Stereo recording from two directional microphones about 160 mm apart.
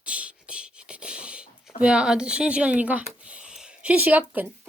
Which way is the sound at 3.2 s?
5° right (ahead or behind).